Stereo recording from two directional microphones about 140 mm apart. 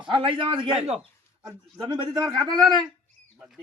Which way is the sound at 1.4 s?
25° right (ahead or behind).